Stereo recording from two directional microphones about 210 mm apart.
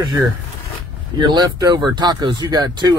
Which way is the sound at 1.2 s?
20° right (ahead or behind).